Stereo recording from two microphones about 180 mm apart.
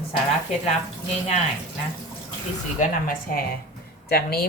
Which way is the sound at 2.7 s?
55° left (ahead or behind).